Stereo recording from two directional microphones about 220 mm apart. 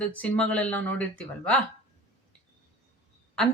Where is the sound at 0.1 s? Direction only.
5° left (ahead or behind).